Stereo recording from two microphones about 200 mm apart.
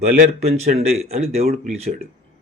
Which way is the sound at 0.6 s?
35° right (ahead or behind).